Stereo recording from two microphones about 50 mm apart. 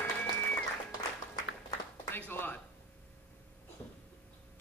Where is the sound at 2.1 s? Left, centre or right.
Left.